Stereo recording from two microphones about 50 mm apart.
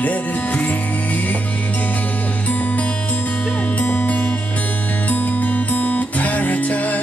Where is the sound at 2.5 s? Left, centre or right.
Left.